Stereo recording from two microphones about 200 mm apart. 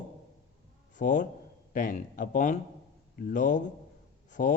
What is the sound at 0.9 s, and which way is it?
A man's voice, 40° left (ahead or behind).